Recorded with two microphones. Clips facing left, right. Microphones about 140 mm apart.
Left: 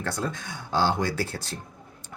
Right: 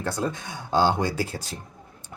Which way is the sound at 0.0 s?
15° right (ahead or behind).